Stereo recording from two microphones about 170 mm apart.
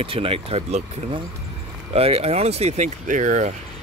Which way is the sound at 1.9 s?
35° right (ahead or behind).